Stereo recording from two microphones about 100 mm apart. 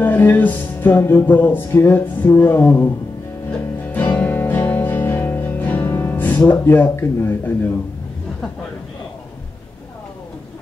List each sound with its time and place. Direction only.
0.0 s music: 20° left (ahead or behind)